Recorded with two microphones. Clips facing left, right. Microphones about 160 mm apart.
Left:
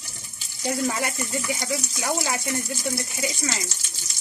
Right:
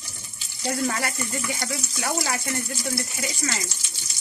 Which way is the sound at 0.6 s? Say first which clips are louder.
Left 1 dB; 15° left (ahead or behind).